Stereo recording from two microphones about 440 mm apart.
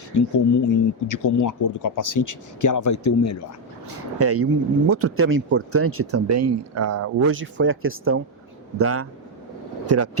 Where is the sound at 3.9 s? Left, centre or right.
Right.